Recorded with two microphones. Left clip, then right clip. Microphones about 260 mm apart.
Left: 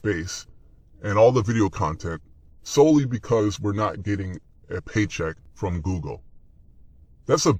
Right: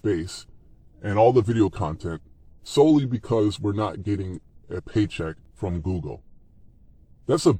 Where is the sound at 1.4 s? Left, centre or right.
Left.